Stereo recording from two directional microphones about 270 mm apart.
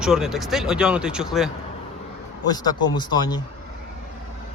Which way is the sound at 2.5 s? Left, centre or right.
Centre.